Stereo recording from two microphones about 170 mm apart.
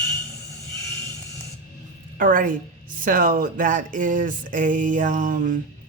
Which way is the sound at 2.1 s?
55° right (ahead or behind).